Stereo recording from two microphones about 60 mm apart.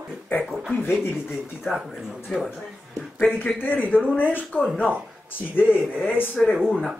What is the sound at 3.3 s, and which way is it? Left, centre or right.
Speech, left.